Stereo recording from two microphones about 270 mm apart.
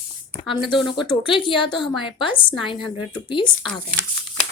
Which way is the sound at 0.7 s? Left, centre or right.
Centre.